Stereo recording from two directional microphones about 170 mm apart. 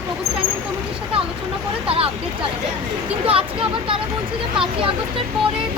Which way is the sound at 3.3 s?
30° right (ahead or behind).